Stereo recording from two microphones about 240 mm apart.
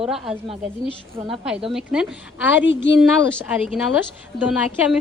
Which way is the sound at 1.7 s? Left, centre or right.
Centre.